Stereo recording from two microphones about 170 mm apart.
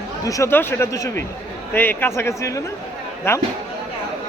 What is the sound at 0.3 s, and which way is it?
A man's voice, 15° left (ahead or behind).